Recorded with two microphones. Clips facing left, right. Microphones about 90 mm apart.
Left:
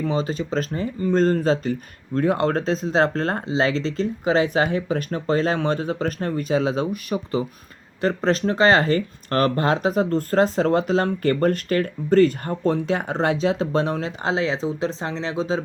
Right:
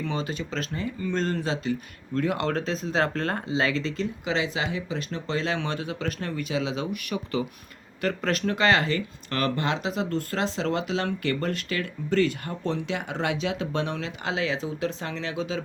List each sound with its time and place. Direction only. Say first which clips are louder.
0.0 s speech: left 6 dB; 35° left (ahead or behind)